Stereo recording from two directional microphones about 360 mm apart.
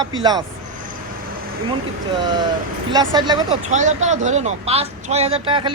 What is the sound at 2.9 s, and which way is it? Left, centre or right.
A man's voice, centre.